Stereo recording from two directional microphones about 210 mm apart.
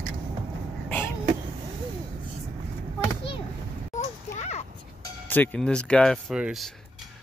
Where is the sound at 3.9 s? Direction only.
35° left (ahead or behind).